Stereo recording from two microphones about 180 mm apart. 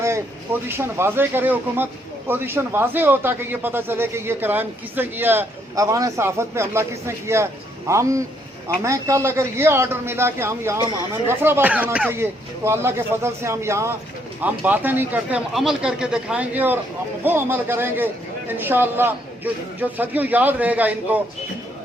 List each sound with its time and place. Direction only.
0.7 s speech: 10° right (ahead or behind)